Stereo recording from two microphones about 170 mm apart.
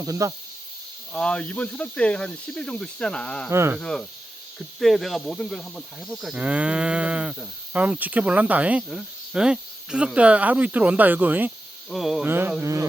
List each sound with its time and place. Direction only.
0.0 s speech: 20° right (ahead or behind)
1.1 s speech: 5° left (ahead or behind)
3.5 s speech: 15° right (ahead or behind)
3.8 s speech: 5° left (ahead or behind); by 12.8 s 15° right (ahead or behind)